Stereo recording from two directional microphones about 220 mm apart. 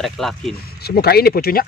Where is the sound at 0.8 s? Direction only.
45° left (ahead or behind).